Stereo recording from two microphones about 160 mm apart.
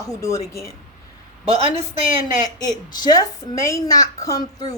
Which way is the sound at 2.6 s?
25° left (ahead or behind).